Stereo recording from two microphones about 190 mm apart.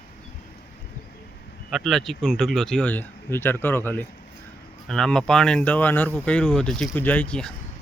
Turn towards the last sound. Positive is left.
turn(degrees=5)  # may be behind; listen again after turning